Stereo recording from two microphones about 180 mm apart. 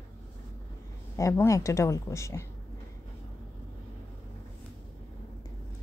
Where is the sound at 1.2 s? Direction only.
15° left (ahead or behind).